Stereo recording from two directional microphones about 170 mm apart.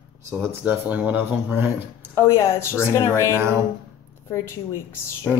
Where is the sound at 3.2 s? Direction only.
15° right (ahead or behind).